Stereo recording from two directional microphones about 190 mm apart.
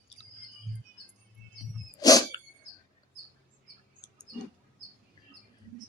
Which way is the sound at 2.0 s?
20° left (ahead or behind).